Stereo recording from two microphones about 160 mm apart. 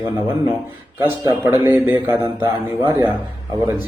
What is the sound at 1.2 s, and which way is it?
A man's voice, 15° right (ahead or behind).